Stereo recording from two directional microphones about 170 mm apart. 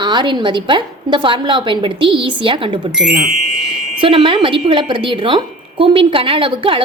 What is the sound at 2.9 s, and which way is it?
Speech, 5° right (ahead or behind).